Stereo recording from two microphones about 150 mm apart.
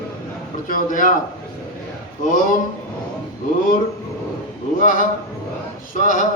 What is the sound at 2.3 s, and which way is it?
Speech, 65° left (ahead or behind).